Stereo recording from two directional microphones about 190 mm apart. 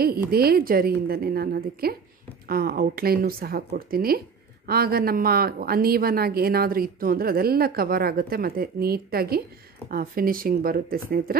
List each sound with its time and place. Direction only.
0.0 s a woman's voice: 55° right (ahead or behind)